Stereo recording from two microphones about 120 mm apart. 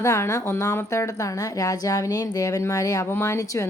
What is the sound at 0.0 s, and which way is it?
A woman's voice, 25° left (ahead or behind).